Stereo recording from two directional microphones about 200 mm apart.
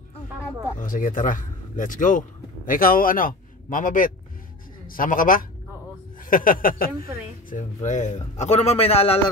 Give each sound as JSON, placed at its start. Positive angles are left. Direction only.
{"t": 0.7, "sound": "a man's voice", "side_deg": 45}